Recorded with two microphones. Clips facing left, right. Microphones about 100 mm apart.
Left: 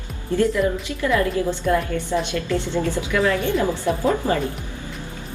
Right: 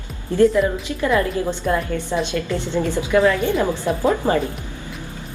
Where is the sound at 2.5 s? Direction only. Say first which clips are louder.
Even; 20° right (ahead or behind).